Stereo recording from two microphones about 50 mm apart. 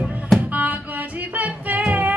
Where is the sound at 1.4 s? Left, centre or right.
Right.